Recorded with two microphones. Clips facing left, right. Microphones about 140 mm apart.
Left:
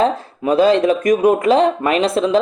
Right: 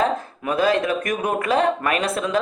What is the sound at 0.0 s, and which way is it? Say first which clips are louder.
Speech: left 5 dB; 25° left (ahead or behind).